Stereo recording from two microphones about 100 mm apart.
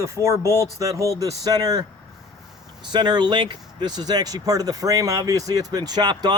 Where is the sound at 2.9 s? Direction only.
45° right (ahead or behind).